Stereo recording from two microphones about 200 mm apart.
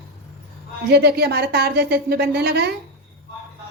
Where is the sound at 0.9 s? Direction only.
55° right (ahead or behind).